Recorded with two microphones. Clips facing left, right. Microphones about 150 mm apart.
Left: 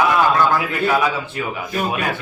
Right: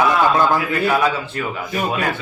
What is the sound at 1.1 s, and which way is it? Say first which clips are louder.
Speech: even; 15° left (ahead or behind).